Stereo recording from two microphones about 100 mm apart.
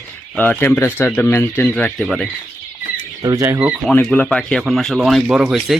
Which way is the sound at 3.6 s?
10° right (ahead or behind).